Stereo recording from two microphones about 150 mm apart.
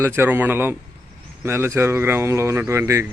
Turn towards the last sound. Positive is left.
turn(degrees=-15)  # may be behind; listen again after turning